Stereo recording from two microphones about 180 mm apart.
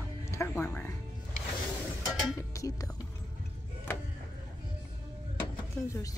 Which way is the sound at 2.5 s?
20° left (ahead or behind).